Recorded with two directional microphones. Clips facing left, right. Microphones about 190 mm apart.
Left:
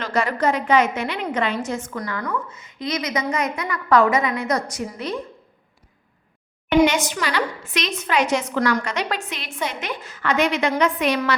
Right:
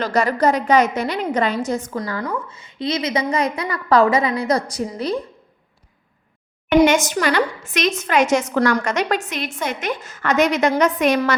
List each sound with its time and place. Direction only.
0.0 s a woman's voice: 40° right (ahead or behind)
6.7 s a woman's voice: 50° right (ahead or behind)